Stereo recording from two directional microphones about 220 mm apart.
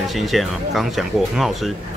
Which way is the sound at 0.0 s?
Centre (ahead or behind).